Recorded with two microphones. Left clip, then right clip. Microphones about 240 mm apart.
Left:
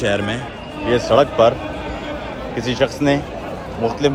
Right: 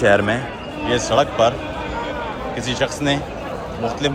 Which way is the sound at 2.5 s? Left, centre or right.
Centre.